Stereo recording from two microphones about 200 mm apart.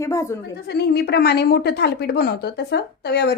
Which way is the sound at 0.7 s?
55° left (ahead or behind).